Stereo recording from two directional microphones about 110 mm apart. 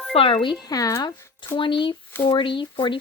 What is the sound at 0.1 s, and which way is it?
Speech, 55° left (ahead or behind).